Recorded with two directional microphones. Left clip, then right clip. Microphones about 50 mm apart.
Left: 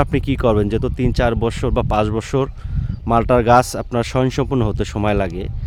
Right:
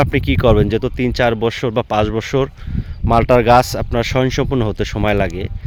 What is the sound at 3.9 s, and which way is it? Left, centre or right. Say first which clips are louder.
Speech: right 2 dB; left.